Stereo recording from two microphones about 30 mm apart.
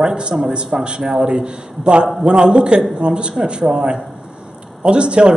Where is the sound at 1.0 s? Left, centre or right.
Right.